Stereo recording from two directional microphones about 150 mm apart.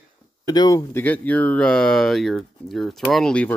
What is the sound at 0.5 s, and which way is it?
Speech, 25° left (ahead or behind).